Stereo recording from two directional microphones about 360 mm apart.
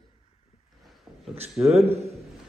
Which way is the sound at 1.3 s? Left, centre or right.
Centre.